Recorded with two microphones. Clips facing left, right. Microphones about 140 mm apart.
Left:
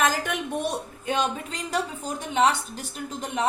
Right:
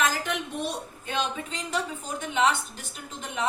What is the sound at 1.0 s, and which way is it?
A woman's voice, 45° left (ahead or behind).